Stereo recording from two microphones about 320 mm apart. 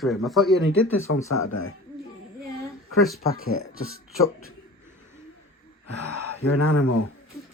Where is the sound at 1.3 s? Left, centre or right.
Left.